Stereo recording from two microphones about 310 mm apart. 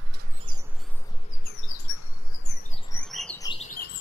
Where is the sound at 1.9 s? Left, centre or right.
Left.